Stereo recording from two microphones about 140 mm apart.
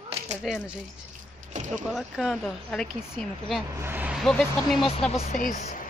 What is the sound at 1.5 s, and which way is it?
Speech, 60° right (ahead or behind).